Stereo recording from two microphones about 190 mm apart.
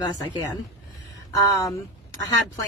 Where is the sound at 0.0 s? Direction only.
20° left (ahead or behind).